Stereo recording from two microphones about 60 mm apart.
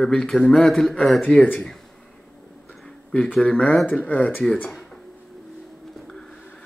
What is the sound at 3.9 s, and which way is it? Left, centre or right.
Speech, left.